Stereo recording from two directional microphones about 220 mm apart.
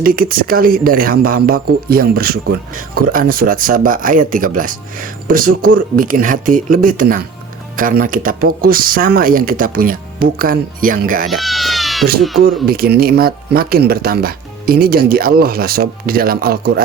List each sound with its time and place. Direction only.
0.0 s speech: 40° right (ahead or behind)
11.3 s cat: centre (ahead or behind)
12.6 s speech: 45° right (ahead or behind)